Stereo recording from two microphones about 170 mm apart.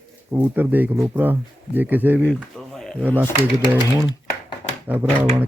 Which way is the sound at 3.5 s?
20° right (ahead or behind).